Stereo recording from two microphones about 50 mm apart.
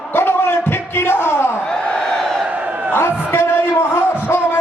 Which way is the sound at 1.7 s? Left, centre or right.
Centre.